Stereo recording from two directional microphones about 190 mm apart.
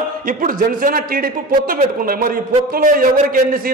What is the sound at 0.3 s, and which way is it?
A man's voice, 45° right (ahead or behind).